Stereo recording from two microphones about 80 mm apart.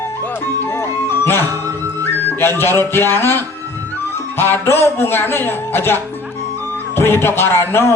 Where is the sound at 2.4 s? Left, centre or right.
Left.